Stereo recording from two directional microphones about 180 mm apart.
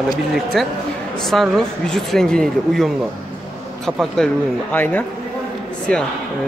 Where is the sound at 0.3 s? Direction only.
Centre (ahead or behind).